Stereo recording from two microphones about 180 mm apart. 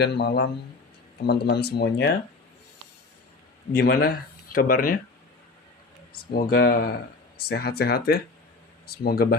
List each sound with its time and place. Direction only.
0.0 s speech: 70° left (ahead or behind)
3.8 s speech: 60° left (ahead or behind)
6.3 s speech: 55° left (ahead or behind)